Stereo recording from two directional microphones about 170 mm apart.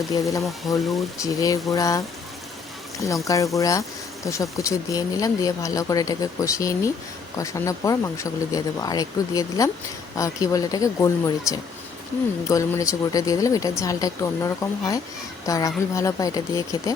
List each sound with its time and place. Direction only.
0.1 s speech: 20° left (ahead or behind)
0.7 s speech: centre (ahead or behind)
1.2 s speech: 20° left (ahead or behind)
3.2 s speech: 20° left (ahead or behind)